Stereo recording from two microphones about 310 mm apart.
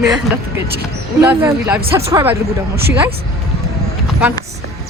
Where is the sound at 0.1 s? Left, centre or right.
Centre.